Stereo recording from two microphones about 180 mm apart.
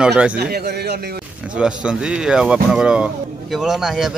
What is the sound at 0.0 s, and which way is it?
Speech, 5° right (ahead or behind).